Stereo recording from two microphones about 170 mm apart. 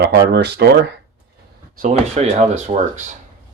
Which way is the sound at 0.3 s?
80° right.